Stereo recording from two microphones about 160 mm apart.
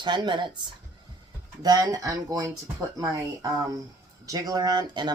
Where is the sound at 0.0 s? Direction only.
30° right (ahead or behind).